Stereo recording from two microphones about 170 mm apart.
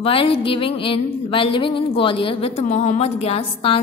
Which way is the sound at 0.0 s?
30° left (ahead or behind).